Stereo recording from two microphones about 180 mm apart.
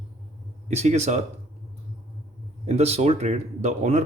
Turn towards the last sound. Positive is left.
turn(degrees=-40)  # may be behind; listen again after turning